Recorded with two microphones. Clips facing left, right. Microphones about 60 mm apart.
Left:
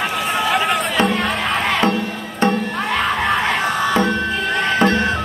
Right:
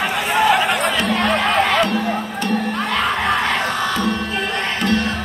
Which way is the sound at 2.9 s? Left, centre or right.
Centre.